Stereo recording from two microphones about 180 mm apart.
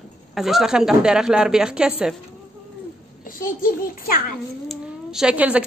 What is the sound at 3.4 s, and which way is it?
Speech, 55° left (ahead or behind).